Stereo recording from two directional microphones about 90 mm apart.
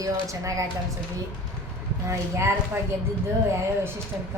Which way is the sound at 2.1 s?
30° right (ahead or behind).